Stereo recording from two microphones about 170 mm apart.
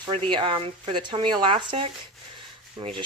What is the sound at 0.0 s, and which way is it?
Speech, 30° right (ahead or behind).